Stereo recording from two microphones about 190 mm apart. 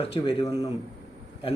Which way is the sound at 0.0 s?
30° left (ahead or behind).